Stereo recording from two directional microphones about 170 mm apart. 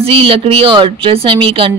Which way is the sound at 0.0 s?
35° right (ahead or behind).